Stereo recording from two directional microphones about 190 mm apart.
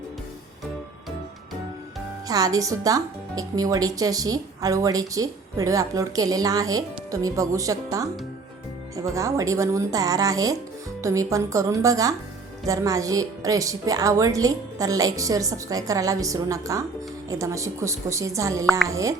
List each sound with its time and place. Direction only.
2.2 s speech: 20° right (ahead or behind)
9.1 s a woman's voice: 15° right (ahead or behind)